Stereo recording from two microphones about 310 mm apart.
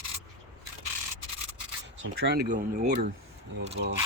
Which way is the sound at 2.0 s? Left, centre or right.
Right.